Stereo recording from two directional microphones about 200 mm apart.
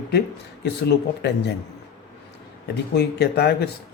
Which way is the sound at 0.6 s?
55° left (ahead or behind).